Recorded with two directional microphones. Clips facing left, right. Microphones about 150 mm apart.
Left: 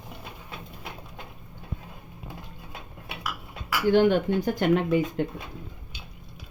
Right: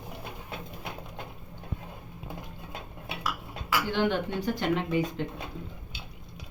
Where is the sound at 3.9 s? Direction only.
45° left (ahead or behind).